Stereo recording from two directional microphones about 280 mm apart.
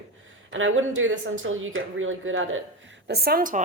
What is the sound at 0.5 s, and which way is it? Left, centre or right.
Speech, right.